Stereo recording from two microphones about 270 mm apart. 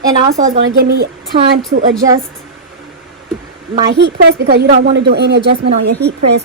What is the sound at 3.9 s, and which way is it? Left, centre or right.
A woman's voice, right.